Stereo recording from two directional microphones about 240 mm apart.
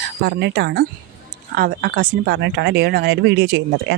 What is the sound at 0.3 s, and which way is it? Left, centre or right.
Speech, right.